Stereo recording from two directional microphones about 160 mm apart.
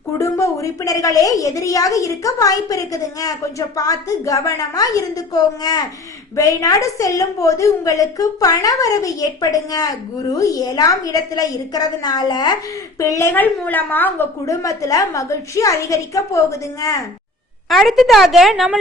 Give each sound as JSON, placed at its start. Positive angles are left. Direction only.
{"t": 0.2, "sound": "a woman's voice", "side_deg": 20}
{"t": 17.7, "sound": "a woman's voice", "side_deg": 0}